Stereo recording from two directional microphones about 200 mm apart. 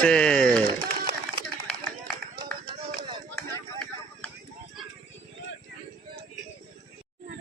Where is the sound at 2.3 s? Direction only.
20° right (ahead or behind).